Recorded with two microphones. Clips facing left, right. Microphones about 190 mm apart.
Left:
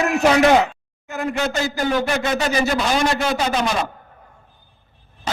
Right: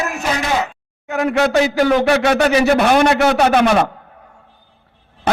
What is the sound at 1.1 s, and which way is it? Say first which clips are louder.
Speech: right 7 dB; 70° right (ahead or behind).